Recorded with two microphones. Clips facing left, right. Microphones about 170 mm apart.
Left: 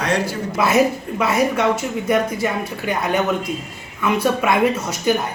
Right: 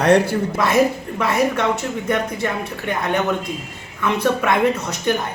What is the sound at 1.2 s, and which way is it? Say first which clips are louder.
Speech: left 1 dB; 5° left (ahead or behind).